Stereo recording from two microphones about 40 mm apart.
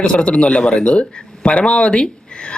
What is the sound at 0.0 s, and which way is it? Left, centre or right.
A man's voice, left.